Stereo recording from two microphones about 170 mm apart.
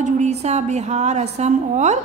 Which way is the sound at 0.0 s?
40° right (ahead or behind).